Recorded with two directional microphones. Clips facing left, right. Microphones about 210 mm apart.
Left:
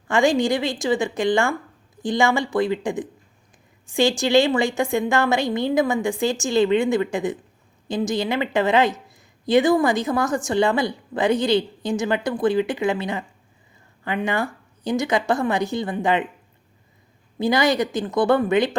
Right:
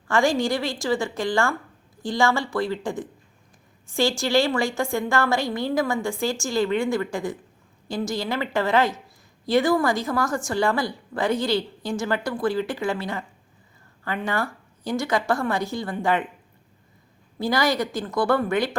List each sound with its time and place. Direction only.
0.1 s a woman's voice: 20° left (ahead or behind)
17.3 s a woman's voice: 20° left (ahead or behind)